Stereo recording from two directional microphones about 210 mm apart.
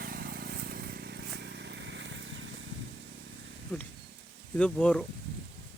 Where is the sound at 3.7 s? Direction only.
10° left (ahead or behind).